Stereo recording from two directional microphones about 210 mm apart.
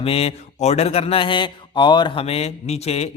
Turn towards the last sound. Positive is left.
turn(degrees=30)  # may be behind; listen again after turning